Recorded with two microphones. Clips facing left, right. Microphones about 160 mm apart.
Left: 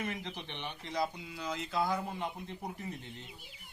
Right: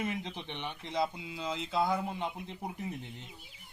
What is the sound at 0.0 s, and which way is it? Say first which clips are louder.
Speech: right 3 dB; 20° right (ahead or behind).